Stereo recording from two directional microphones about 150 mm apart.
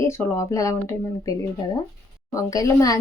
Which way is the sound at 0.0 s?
20° left (ahead or behind).